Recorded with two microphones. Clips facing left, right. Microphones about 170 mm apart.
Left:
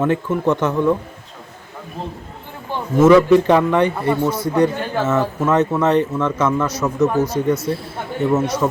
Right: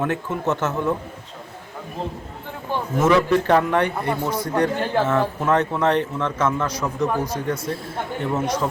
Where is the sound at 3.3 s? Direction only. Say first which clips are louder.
Left 5 dB; 15° left (ahead or behind).